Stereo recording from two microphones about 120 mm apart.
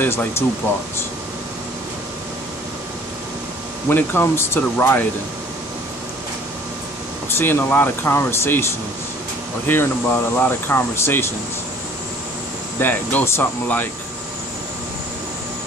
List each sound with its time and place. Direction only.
0.0 s speech: 20° left (ahead or behind)
3.9 s speech: 20° left (ahead or behind)
7.2 s speech: 20° left (ahead or behind)
9.7 s speech: 15° left (ahead or behind)
12.7 s speech: 15° left (ahead or behind)